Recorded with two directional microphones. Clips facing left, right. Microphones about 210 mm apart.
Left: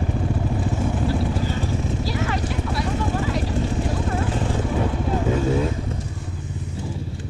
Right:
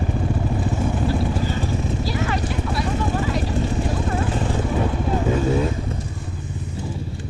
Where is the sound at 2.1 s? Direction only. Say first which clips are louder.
Right 1 dB; 15° right (ahead or behind).